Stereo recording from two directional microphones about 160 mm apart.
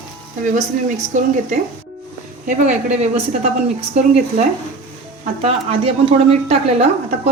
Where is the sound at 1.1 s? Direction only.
50° right (ahead or behind).